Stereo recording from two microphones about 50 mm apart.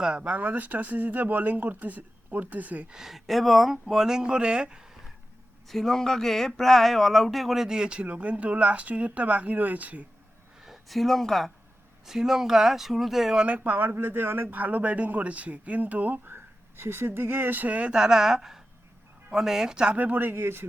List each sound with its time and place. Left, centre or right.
0.2 s speech: right
2.9 s speech: centre
5.6 s speech: centre
7.7 s speech: centre
10.6 s speech: centre
13.4 s speech: right
17.9 s speech: centre
20.0 s speech: right